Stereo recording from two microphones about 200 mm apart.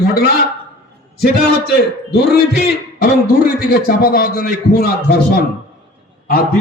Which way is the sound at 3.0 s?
50° left (ahead or behind).